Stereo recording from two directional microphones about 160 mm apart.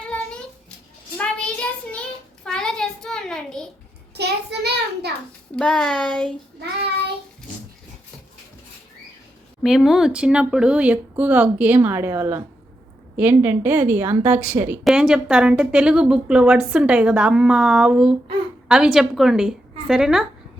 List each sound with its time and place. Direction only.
1.2 s child singing: 5° left (ahead or behind)
4.1 s child singing: 90° right
5.5 s a woman's voice: 5° left (ahead or behind)
9.6 s a woman's voice: centre (ahead or behind)